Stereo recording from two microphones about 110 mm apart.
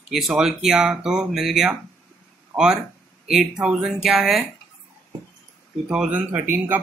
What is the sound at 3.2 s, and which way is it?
Speech, 5° right (ahead or behind).